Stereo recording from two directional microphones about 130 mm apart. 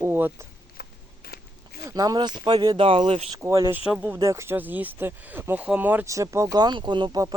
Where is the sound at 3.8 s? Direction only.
10° right (ahead or behind).